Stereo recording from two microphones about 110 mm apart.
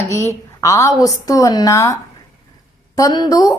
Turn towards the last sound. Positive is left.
turn(degrees=35)  # may be behind; listen again after turning